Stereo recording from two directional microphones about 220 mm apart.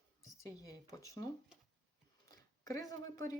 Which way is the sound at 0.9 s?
15° left (ahead or behind).